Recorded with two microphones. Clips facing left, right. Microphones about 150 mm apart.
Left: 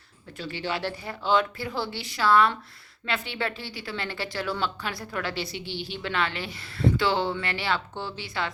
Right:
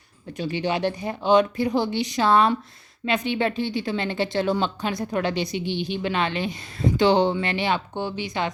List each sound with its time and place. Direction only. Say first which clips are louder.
0.3 s speech: right 6 dB; 15° right (ahead or behind)